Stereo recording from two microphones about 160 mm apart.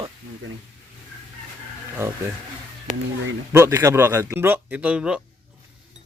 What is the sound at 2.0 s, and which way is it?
Speech, 15° right (ahead or behind).